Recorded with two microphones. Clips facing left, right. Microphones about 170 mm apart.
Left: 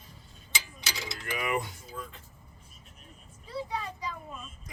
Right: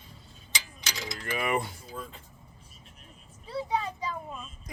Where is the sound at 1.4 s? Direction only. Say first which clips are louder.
Right 2 dB; 35° right (ahead or behind).